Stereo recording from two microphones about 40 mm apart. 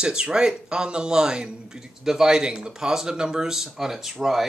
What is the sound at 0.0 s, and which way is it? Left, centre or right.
A man's voice, centre.